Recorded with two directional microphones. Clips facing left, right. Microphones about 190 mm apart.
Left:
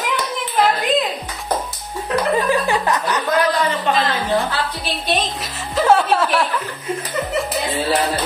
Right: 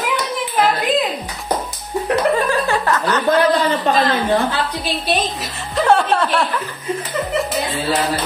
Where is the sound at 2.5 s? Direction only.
15° left (ahead or behind).